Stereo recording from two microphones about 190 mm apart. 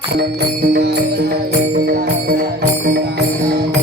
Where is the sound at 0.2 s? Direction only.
60° right (ahead or behind).